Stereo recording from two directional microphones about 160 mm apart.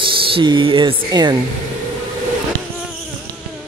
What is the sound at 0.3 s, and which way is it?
Speech, 30° right (ahead or behind).